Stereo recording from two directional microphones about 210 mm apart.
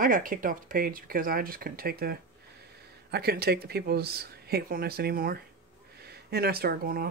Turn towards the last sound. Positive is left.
turn(degrees=-45)  # may be behind; listen again after turning